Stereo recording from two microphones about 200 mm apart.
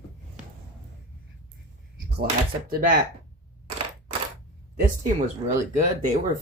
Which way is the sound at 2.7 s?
45° right (ahead or behind).